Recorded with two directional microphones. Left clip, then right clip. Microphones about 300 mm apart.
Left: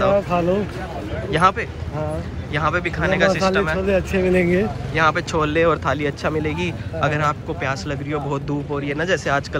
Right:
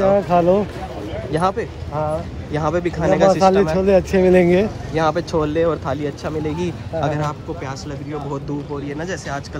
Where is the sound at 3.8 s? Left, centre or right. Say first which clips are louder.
Right 5 dB; right.